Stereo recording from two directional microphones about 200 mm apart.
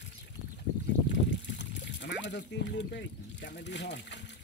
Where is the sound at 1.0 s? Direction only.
65° left (ahead or behind).